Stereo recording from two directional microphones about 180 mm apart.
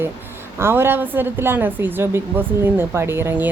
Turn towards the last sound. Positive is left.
turn(degrees=-10)  # may be behind; listen again after turning